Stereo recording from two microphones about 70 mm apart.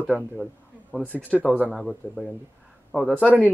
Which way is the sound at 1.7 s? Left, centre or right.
Centre.